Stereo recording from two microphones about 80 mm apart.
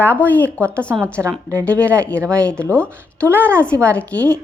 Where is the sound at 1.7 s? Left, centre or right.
Centre.